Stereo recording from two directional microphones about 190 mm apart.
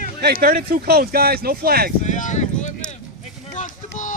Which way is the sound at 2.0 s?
40° left (ahead or behind).